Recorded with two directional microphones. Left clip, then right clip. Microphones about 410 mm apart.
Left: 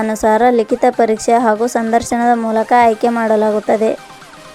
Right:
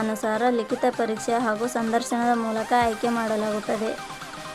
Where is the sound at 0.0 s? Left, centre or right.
Centre.